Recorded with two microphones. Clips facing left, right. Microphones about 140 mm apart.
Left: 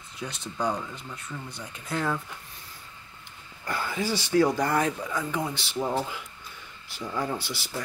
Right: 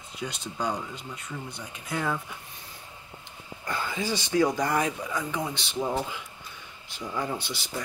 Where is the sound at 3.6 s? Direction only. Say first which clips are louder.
Left 1 dB; 20° right (ahead or behind).